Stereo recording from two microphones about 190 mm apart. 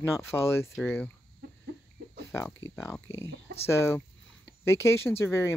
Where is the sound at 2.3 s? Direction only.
15° left (ahead or behind).